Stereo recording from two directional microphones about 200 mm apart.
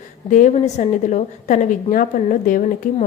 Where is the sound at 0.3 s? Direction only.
40° left (ahead or behind).